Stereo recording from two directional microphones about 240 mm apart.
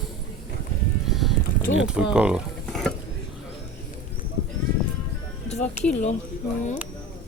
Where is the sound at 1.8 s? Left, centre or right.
Centre.